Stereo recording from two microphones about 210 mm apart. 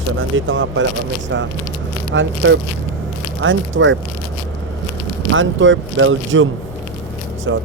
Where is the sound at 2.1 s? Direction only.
60° right (ahead or behind).